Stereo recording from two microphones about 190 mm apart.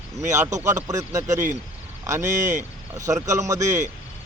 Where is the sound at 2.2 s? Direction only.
40° right (ahead or behind).